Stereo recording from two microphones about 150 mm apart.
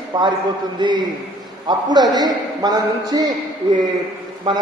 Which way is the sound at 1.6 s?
30° right (ahead or behind).